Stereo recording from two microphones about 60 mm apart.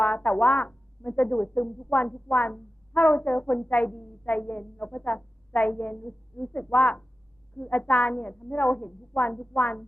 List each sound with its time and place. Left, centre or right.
0.0 s speech: left